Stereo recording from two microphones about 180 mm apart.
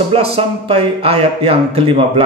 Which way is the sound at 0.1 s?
35° right (ahead or behind).